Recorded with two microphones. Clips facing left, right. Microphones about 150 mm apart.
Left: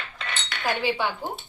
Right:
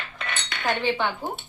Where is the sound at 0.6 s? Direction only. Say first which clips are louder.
Right 1 dB; 10° left (ahead or behind).